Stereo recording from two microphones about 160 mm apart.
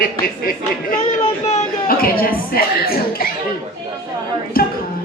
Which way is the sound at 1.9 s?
65° left (ahead or behind).